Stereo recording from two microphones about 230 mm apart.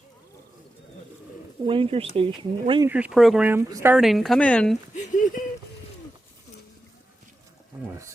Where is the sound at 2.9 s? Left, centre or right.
Centre.